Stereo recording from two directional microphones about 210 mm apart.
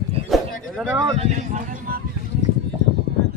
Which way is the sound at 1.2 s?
40° right (ahead or behind).